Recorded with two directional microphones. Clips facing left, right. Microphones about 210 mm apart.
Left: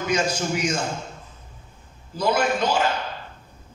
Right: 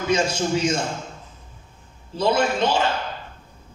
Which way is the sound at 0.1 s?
25° right (ahead or behind).